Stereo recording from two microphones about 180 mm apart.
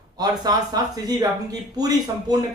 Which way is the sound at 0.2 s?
20° right (ahead or behind).